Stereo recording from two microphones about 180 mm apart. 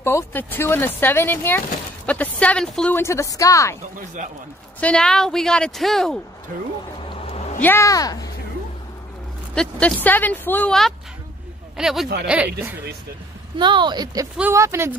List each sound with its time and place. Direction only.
0.0 s speech: 10° left (ahead or behind)
4.7 s speech: 5° left (ahead or behind)
7.1 s a sound: 35° left (ahead or behind)
7.6 s speech: 15° left (ahead or behind)
9.6 s speech: 5° left (ahead or behind)
13.6 s a woman's voice: 25° right (ahead or behind)
14.3 s speech: 10° right (ahead or behind)